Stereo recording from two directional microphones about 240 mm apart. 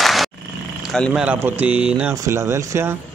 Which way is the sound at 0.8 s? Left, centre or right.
Centre.